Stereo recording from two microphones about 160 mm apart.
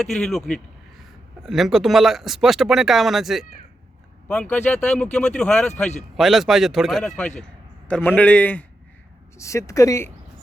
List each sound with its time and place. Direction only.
0.0 s a man's voice: 5° left (ahead or behind)